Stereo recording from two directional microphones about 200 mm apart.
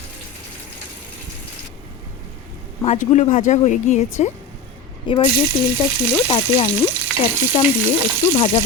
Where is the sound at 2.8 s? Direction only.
35° left (ahead or behind).